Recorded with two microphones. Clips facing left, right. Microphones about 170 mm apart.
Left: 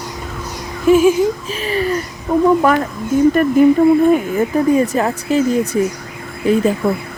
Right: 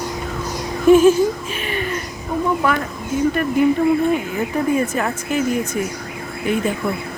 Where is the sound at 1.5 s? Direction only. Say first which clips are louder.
Left 6 dB; 35° left (ahead or behind).